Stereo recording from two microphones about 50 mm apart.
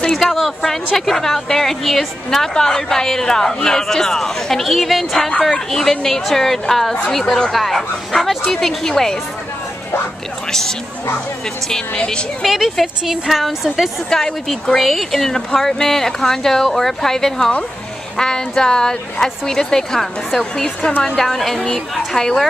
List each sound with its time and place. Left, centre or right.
0.1 s a woman's voice: centre
11.7 s speech: centre
12.4 s a woman's voice: centre
14.1 s a woman's voice: centre